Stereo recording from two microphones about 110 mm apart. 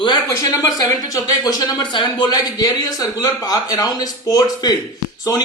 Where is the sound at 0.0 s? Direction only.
45° left (ahead or behind).